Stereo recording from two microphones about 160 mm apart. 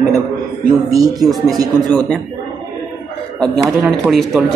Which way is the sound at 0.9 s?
20° right (ahead or behind).